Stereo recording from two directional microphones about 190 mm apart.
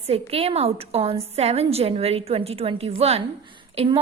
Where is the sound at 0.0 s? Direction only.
30° right (ahead or behind).